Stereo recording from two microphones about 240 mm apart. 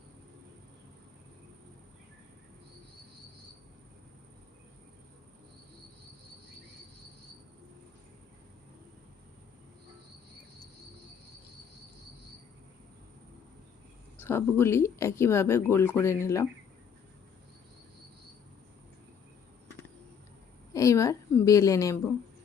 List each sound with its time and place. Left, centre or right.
14.2 s speech: centre
20.7 s speech: centre